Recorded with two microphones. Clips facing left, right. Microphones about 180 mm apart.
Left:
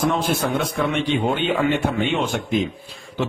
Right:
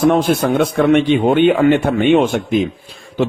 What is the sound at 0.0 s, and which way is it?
A man's voice, 60° right (ahead or behind).